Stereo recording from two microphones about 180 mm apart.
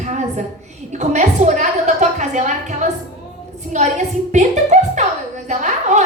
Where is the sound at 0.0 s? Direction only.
40° right (ahead or behind).